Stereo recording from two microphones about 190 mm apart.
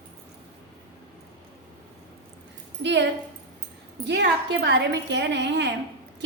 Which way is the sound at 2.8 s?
65° right (ahead or behind).